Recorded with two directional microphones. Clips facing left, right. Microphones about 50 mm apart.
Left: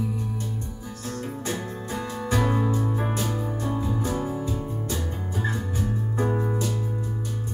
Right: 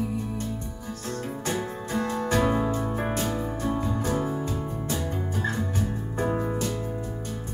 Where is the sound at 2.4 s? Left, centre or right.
Centre.